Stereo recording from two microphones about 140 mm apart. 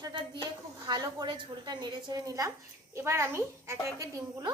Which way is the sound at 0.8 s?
30° right (ahead or behind).